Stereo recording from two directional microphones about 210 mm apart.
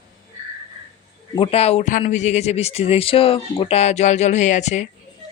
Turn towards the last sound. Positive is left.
turn(degrees=35)  # may be behind; listen again after turning